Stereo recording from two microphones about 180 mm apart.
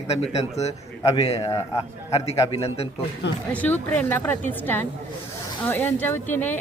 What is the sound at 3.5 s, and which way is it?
A woman's voice, 10° left (ahead or behind).